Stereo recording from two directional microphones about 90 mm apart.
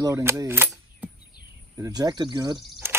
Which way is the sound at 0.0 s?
35° right (ahead or behind).